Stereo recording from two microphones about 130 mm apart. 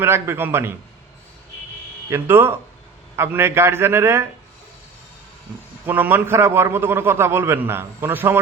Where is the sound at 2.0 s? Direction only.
20° right (ahead or behind).